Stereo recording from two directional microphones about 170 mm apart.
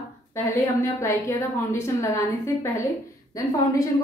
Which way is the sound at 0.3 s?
15° left (ahead or behind).